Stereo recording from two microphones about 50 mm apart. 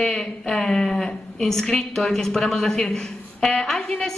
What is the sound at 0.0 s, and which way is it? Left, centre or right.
A woman's voice, centre.